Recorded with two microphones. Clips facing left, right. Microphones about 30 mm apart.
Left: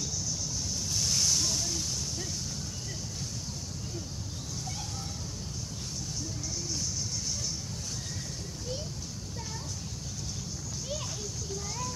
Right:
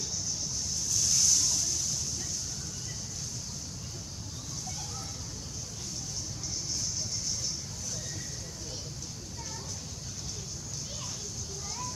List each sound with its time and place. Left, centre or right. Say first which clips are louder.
0.8 s waves: right 1 dB; left